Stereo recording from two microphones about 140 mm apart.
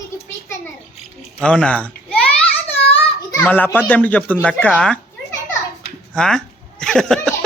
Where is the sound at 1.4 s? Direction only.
5° left (ahead or behind).